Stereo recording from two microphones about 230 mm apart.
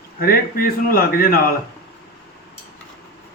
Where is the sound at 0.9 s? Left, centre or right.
Left.